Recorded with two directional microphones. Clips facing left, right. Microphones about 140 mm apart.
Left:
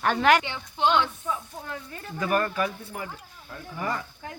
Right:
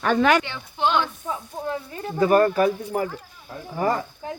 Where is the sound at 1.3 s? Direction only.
20° right (ahead or behind).